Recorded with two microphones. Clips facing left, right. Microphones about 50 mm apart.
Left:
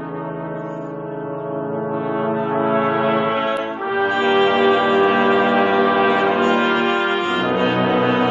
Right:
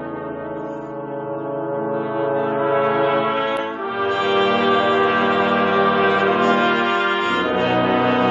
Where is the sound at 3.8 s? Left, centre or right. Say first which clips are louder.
Left 3 dB; left; by 6.4 s centre.